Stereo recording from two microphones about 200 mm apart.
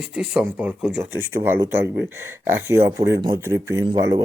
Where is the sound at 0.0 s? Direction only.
5° right (ahead or behind).